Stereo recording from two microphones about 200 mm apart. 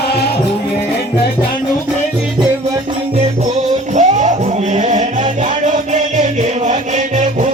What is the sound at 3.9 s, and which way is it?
Music, 35° right (ahead or behind).